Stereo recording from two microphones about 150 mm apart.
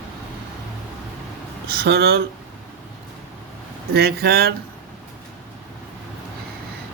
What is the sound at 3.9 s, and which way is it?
Speech, 90° right.